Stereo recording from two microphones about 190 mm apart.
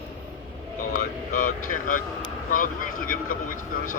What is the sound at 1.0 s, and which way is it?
Speech, 45° left (ahead or behind).